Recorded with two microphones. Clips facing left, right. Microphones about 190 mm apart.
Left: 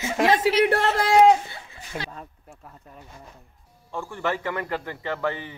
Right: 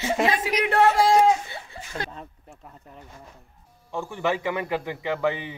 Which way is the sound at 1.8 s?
35° right (ahead or behind).